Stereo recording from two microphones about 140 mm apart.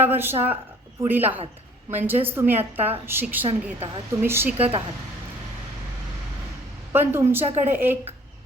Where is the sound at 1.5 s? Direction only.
15° right (ahead or behind).